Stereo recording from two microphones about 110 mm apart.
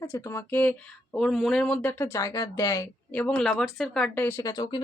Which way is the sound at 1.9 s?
25° left (ahead or behind).